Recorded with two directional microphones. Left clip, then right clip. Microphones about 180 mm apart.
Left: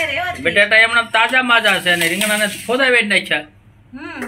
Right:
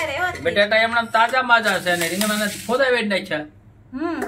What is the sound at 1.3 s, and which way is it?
Speech, 15° left (ahead or behind).